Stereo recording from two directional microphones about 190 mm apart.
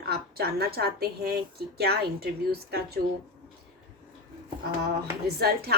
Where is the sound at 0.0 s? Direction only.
55° right (ahead or behind).